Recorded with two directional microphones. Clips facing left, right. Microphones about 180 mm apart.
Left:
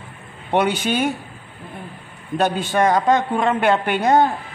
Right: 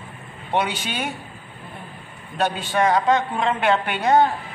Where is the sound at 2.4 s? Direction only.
45° left (ahead or behind).